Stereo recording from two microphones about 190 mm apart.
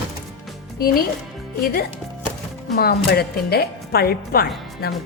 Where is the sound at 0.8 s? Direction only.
50° left (ahead or behind).